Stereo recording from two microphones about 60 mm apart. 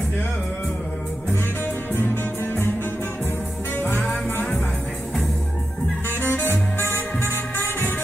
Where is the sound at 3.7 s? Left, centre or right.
Left.